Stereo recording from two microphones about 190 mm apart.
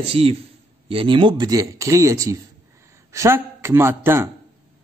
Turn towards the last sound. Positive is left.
turn(degrees=-15)  # may be behind; listen again after turning